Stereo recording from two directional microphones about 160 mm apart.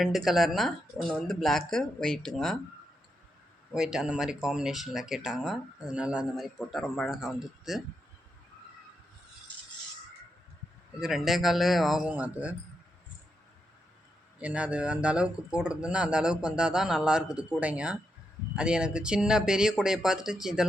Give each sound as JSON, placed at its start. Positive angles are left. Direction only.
{"t": 0.0, "sound": "speech", "side_deg": 0}
{"t": 3.7, "sound": "speech", "side_deg": -5}
{"t": 11.0, "sound": "speech", "side_deg": 0}
{"t": 14.3, "sound": "speech", "side_deg": -5}